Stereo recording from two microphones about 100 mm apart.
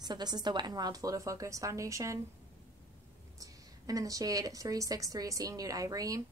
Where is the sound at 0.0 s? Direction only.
45° right (ahead or behind).